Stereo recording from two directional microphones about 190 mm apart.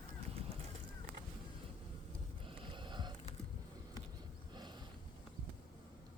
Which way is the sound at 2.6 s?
25° right (ahead or behind).